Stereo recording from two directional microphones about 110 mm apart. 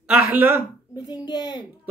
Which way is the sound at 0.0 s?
15° right (ahead or behind).